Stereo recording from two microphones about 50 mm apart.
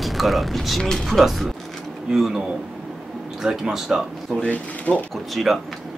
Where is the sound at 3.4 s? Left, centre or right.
Centre.